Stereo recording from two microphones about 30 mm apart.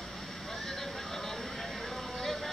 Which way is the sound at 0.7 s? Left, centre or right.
Centre.